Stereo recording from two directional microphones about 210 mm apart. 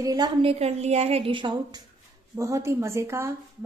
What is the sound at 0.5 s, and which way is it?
A woman's voice, 30° right (ahead or behind).